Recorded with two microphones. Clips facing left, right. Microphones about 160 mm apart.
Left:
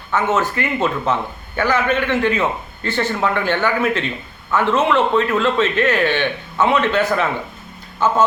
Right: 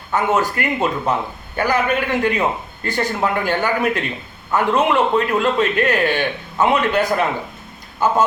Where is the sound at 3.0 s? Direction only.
40° right (ahead or behind).